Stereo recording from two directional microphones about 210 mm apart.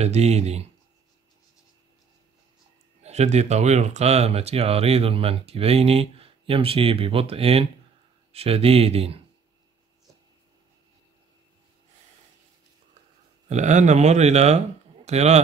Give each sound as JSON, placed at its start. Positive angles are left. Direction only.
{"t": 0.0, "sound": "speech", "side_deg": -30}
{"t": 3.0, "sound": "speech", "side_deg": -30}
{"t": 13.5, "sound": "speech", "side_deg": -35}